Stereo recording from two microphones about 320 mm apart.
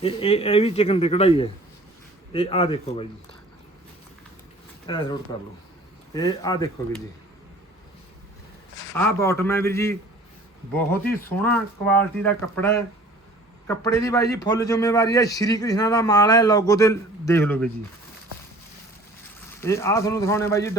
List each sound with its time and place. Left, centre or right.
0.0 s a man's voice: centre
4.9 s a man's voice: centre
6.1 s a man's voice: centre
9.0 s a man's voice: centre
11.0 s a man's voice: centre
19.5 s a man's voice: centre